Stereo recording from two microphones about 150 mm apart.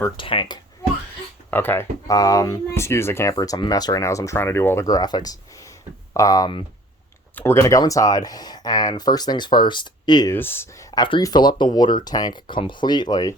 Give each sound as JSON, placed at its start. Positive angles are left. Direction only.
{"t": 0.2, "sound": "speech", "side_deg": 35}
{"t": 1.5, "sound": "speech", "side_deg": 15}
{"t": 10.3, "sound": "speech", "side_deg": 15}